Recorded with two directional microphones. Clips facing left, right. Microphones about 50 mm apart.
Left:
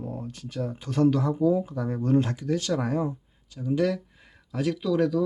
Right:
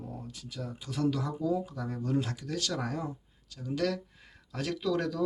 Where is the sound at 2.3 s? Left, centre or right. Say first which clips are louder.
Left 8 dB; left; by 5.2 s centre.